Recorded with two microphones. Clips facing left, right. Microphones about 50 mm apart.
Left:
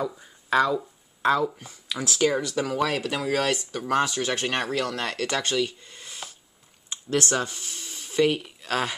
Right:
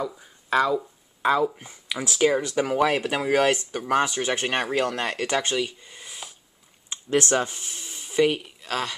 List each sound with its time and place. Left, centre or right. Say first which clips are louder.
0.0 s speech: left 1 dB; centre
1.6 s speech: right 1 dB; right
6.9 s speech: right 3 dB; right; by 8.9 s centre